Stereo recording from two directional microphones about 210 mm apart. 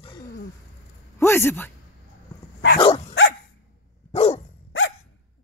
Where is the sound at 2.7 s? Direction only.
25° left (ahead or behind).